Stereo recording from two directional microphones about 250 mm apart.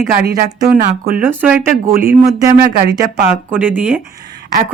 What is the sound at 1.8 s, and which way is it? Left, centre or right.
Speech, right.